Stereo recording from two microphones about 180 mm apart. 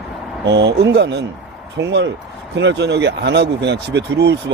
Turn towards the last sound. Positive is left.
turn(degrees=-70)  # may be behind; listen again after turning